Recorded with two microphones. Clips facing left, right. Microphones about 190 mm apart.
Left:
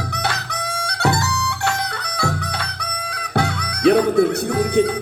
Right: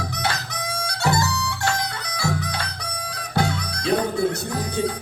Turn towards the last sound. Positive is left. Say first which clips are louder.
# left 8 dB
turn(degrees=65)  # may be behind; listen again after turning